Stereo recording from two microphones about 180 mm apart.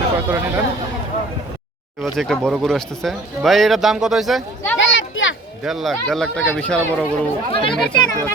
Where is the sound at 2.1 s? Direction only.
Centre (ahead or behind).